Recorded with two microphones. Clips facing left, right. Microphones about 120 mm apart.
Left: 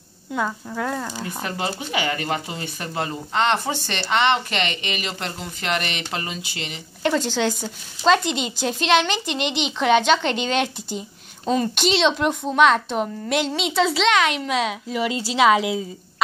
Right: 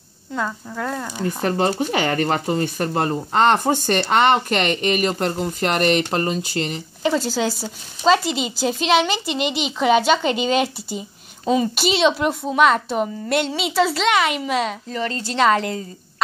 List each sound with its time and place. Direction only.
0.3 s speech: 5° left (ahead or behind)
1.2 s speech: 40° right (ahead or behind)
7.0 s speech: 5° right (ahead or behind)